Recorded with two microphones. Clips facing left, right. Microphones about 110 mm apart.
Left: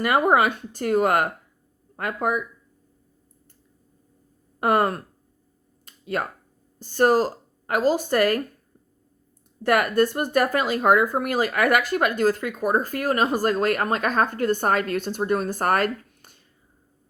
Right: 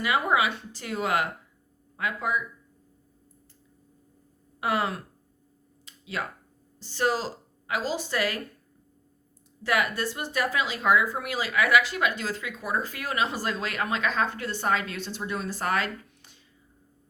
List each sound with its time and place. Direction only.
0.0 s speech: 50° left (ahead or behind)
4.6 s speech: 50° left (ahead or behind)
5.8 s a sound: 50° left (ahead or behind)
6.7 s speech: 50° left (ahead or behind)
9.6 s speech: 50° left (ahead or behind)